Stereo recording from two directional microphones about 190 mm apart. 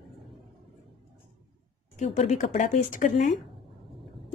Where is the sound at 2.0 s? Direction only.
35° left (ahead or behind).